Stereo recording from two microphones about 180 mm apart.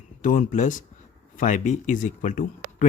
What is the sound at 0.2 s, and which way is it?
Speech, 45° left (ahead or behind).